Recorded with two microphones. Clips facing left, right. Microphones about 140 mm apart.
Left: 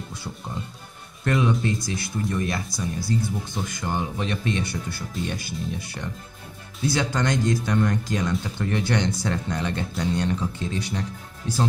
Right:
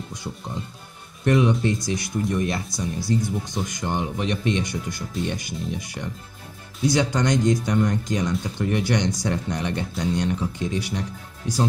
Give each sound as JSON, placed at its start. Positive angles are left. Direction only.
{"t": 1.2, "sound": "speech", "side_deg": -20}